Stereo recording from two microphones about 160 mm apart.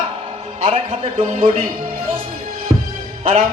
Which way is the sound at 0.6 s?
35° right (ahead or behind).